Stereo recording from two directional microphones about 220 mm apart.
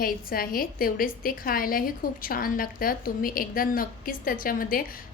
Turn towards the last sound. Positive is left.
turn(degrees=40)  # may be behind; listen again after turning